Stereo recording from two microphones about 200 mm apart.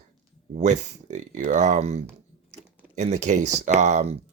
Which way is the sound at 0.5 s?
35° right (ahead or behind).